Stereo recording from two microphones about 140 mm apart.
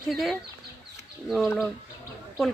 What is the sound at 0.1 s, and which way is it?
Speech, centre (ahead or behind).